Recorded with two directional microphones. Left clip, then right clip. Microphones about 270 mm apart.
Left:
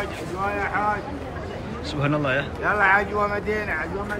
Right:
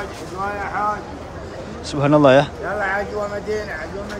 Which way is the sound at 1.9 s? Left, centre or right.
Centre.